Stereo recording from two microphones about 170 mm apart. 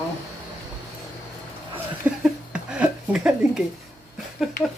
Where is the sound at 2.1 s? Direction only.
5° right (ahead or behind).